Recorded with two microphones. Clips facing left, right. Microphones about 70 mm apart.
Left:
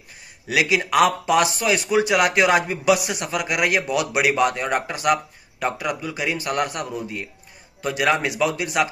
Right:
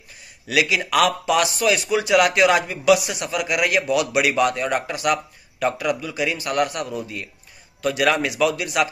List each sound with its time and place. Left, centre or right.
0.5 s speech: left